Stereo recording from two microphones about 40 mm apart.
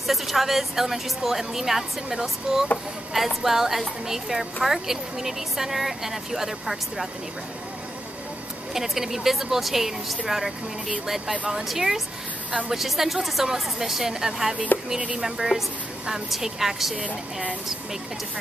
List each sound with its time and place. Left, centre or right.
0.0 s a woman's voice: centre
8.7 s a woman's voice: centre
11.5 s a woman's voice: centre
14.7 s music: left
15.1 s a woman's voice: centre
16.9 s speech: right